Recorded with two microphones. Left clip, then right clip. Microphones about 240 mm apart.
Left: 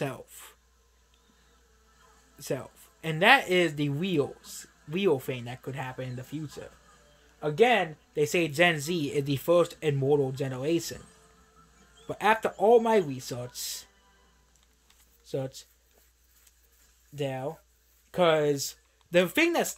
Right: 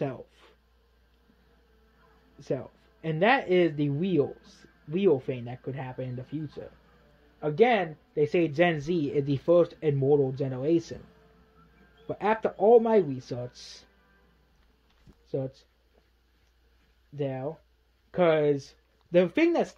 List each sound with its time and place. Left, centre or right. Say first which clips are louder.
2.3 s speech: right 1 dB; centre
12.1 s speech: left 2 dB; centre
15.2 s speech: right 1 dB; centre
17.1 s speech: even; centre